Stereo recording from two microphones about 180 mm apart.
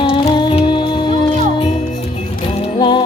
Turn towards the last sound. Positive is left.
turn(degrees=25)  # may be behind; listen again after turning